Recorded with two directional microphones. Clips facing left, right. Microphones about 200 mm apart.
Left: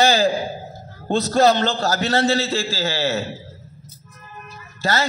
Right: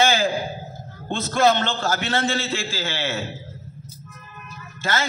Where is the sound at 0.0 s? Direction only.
40° left (ahead or behind).